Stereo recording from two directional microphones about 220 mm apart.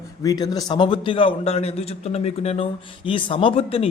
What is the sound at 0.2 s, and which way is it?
A man's voice, 15° left (ahead or behind).